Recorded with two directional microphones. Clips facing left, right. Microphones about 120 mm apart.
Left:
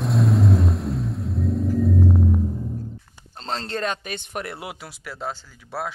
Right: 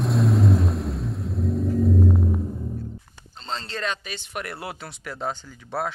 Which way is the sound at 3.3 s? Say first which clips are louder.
Left 3 dB; 65° left (ahead or behind).